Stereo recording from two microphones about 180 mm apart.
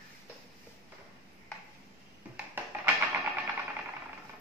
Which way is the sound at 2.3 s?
10° right (ahead or behind).